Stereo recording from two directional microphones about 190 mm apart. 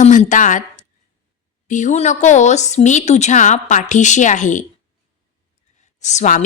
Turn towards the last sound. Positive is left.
turn(degrees=40)  # may be behind; listen again after turning